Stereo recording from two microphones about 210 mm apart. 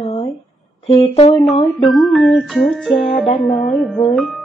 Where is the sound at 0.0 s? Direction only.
25° left (ahead or behind).